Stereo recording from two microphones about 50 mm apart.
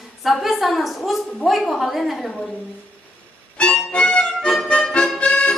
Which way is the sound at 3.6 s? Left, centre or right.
Left.